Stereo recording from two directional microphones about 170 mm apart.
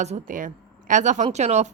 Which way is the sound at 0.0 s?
45° right (ahead or behind).